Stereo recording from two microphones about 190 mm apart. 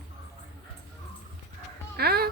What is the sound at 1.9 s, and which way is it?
Music, 55° right (ahead or behind).